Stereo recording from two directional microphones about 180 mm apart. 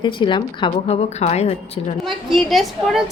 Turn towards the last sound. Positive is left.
turn(degrees=0)  # may be behind; listen again after turning